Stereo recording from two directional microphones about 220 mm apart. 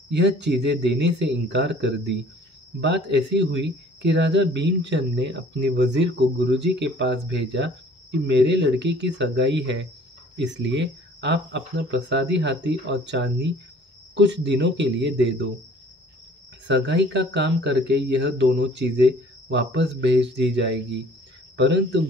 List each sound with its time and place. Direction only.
0.1 s speech: 50° right (ahead or behind)
16.6 s speech: 55° right (ahead or behind)